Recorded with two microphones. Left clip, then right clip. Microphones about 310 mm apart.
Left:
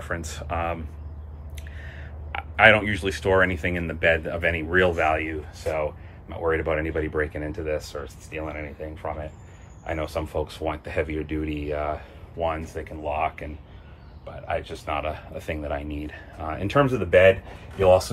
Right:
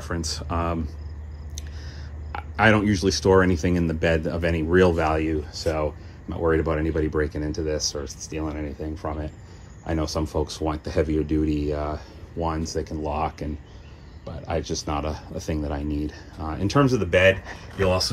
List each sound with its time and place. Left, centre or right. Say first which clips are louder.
0.0 s speech: right 1 dB; centre
2.3 s a sound: left 3 dB; centre
3.3 s speech: right 1 dB; centre